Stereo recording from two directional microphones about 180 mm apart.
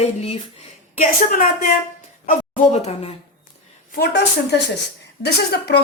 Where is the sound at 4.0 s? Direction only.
70° left (ahead or behind).